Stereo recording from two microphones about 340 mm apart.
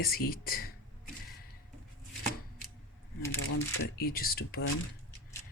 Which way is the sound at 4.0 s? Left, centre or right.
Left.